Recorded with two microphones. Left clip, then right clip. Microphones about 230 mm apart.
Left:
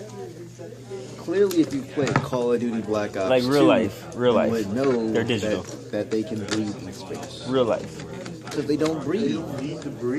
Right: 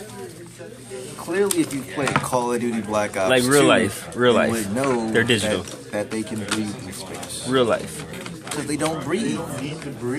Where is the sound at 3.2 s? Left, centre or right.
Right.